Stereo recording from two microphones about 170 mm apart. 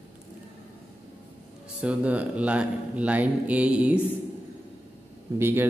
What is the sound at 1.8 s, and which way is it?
Speech, 10° right (ahead or behind).